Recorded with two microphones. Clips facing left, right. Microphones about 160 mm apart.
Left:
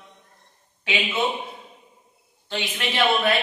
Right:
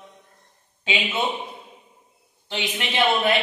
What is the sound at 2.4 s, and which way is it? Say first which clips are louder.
Speech: even; 20° right (ahead or behind).